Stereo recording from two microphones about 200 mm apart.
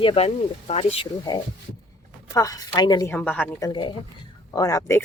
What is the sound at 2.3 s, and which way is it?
Speech, 15° left (ahead or behind).